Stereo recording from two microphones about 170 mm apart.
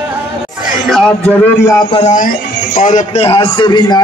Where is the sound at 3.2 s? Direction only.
35° left (ahead or behind).